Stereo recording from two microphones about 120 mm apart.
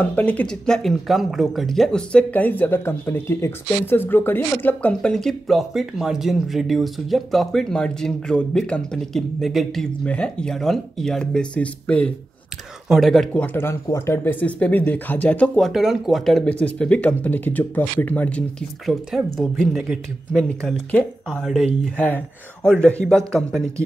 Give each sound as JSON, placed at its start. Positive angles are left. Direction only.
{"t": 0.0, "sound": "speech", "side_deg": 10}
{"t": 10.0, "sound": "speech", "side_deg": 10}
{"t": 12.8, "sound": "speech", "side_deg": 0}
{"t": 13.3, "sound": "speech", "side_deg": 15}
{"t": 18.9, "sound": "speech", "side_deg": 0}